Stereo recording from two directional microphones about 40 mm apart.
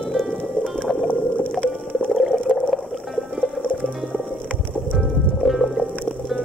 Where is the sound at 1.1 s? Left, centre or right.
Right.